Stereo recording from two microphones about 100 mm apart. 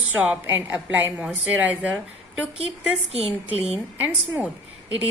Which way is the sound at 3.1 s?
80° right.